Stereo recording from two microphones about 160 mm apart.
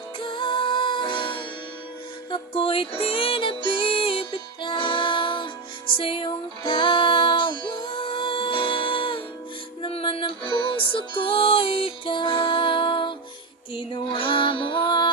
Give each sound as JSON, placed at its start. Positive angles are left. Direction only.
{"t": 0.2, "sound": "music", "side_deg": 30}